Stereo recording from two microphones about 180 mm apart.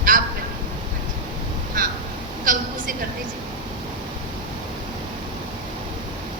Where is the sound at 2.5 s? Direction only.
50° right (ahead or behind).